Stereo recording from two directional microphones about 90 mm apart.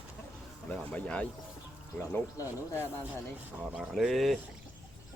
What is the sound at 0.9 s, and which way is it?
Speech, 15° left (ahead or behind).